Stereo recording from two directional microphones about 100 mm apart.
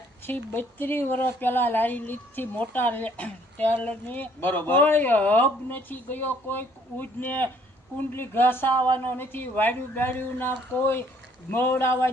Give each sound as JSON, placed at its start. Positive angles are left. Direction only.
{"t": 0.3, "sound": "speech", "side_deg": 20}